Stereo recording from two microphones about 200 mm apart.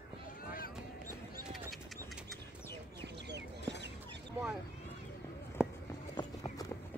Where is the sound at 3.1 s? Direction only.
60° right (ahead or behind).